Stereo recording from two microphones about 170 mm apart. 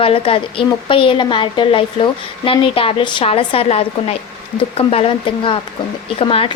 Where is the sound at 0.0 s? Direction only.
35° left (ahead or behind).